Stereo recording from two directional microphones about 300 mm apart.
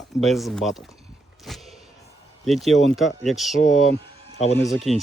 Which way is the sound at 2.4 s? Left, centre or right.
Centre.